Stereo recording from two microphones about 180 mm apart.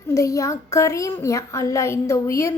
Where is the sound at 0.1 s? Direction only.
15° left (ahead or behind).